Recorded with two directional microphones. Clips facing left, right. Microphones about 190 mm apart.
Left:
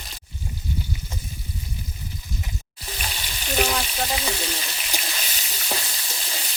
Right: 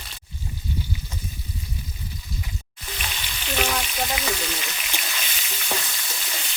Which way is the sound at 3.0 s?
40° left (ahead or behind).